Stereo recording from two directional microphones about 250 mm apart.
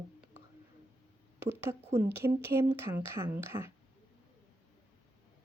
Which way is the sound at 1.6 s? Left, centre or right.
Centre.